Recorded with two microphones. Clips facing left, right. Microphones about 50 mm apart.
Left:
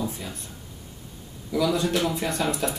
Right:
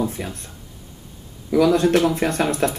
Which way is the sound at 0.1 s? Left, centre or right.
Right.